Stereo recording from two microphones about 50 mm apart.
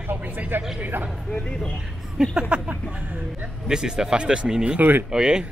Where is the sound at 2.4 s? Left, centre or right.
Centre.